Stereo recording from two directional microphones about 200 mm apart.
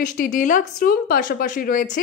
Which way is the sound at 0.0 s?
40° left (ahead or behind).